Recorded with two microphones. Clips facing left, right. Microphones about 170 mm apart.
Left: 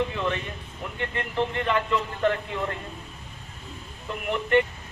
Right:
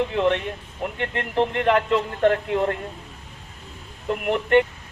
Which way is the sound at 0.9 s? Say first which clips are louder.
Right 4 dB; 75° right (ahead or behind).